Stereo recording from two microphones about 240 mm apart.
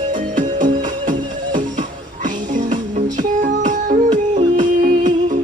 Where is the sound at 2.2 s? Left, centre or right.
Right.